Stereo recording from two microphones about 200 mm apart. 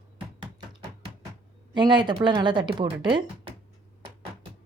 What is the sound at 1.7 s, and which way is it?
Speech, 20° right (ahead or behind).